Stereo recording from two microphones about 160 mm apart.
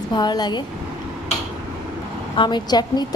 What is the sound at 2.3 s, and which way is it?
Speech, 30° left (ahead or behind).